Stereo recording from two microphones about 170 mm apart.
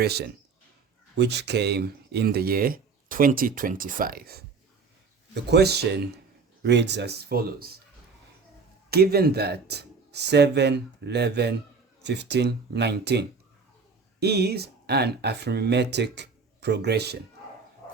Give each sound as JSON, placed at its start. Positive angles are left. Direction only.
{"t": 0.0, "sound": "speech", "side_deg": -70}
{"t": 1.1, "sound": "speech", "side_deg": -85}
{"t": 5.3, "sound": "speech", "side_deg": -80}
{"t": 6.6, "sound": "speech", "side_deg": -90}
{"t": 8.9, "sound": "speech", "side_deg": -65}
{"t": 12.0, "sound": "speech", "side_deg": -90}